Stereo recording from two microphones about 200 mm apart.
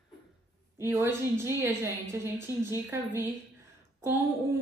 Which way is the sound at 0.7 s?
15° right (ahead or behind).